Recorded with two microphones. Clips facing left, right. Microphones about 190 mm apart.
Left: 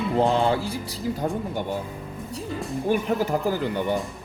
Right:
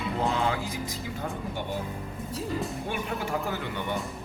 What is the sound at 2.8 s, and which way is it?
Speech, 35° left (ahead or behind).